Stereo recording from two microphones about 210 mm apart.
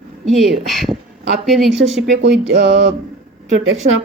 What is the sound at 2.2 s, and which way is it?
Music, 60° right (ahead or behind).